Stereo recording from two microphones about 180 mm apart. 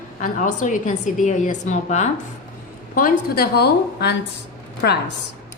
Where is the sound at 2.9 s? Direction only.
55° left (ahead or behind).